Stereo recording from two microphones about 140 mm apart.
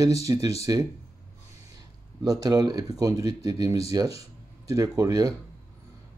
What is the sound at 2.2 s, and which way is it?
Speech, 25° right (ahead or behind).